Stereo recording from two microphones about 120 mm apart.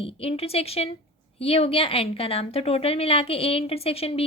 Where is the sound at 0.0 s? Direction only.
55° left (ahead or behind).